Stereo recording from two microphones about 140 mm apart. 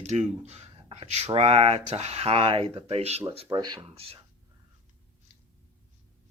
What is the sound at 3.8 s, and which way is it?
Speech, 45° right (ahead or behind).